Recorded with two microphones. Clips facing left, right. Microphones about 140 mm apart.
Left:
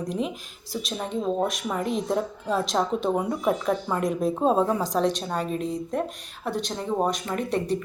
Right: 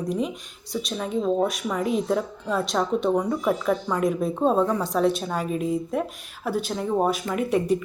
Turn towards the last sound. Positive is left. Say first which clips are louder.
# right 3 dB
turn(degrees=-10)  # may be behind; listen again after turning